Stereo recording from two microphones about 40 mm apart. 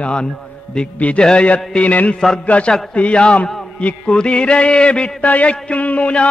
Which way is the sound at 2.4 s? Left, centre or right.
Left.